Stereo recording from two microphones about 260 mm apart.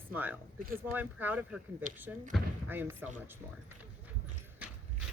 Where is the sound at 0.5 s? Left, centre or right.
Right.